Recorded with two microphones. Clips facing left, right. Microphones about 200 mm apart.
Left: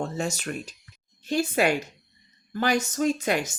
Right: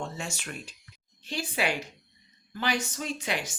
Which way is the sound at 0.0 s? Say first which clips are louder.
Left 7 dB; 40° left (ahead or behind).